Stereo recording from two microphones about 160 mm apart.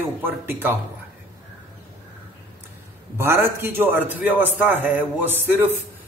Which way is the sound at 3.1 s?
15° right (ahead or behind).